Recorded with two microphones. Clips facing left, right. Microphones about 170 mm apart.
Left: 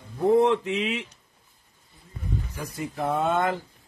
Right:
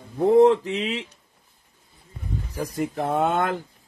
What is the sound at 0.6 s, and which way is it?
Speech, 35° right (ahead or behind).